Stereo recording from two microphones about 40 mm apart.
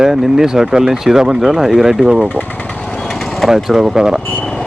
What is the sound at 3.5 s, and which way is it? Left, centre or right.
Speech, centre.